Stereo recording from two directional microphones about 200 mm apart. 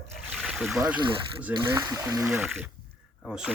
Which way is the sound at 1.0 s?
25° right (ahead or behind).